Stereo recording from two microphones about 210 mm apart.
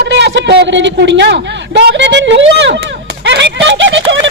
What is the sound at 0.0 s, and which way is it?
A man's voice, 55° right (ahead or behind).